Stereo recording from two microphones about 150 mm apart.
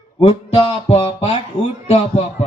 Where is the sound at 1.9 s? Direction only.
50° left (ahead or behind).